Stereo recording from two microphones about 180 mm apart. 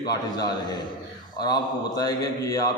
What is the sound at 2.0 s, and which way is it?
Speech, 20° left (ahead or behind).